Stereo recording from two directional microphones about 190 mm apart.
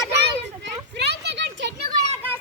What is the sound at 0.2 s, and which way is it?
Children playing, 60° right (ahead or behind).